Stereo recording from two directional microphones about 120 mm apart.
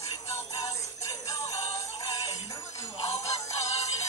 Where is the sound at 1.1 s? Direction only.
25° left (ahead or behind).